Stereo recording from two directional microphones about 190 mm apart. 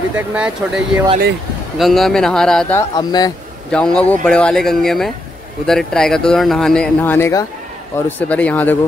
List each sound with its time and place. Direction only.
0.1 s speech: 5° right (ahead or behind)
3.0 s speech: 20° left (ahead or behind)
3.7 s speech: 5° left (ahead or behind)